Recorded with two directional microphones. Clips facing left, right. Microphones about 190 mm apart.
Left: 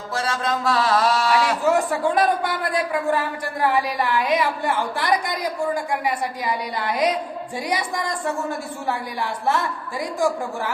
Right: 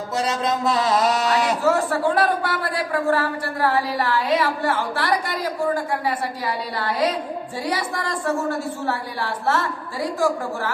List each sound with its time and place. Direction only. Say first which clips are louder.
0.1 s speech: right 1 dB; 20° right (ahead or behind)
1.6 s a man's voice: even; 15° left (ahead or behind)